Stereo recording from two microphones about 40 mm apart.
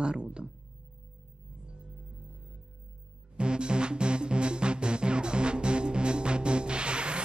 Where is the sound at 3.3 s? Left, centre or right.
Right.